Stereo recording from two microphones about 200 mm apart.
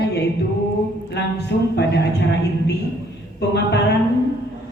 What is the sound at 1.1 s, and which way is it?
Speech, 55° left (ahead or behind).